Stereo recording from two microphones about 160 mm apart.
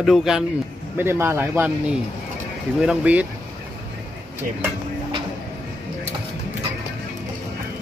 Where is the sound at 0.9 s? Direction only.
15° right (ahead or behind).